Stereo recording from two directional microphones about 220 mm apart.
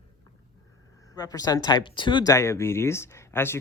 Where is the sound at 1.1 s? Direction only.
15° left (ahead or behind).